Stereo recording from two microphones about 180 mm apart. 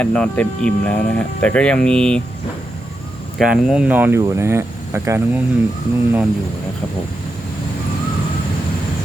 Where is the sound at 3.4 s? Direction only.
5° right (ahead or behind).